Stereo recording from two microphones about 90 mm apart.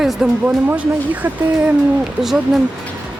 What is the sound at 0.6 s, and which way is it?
Speech, 20° right (ahead or behind).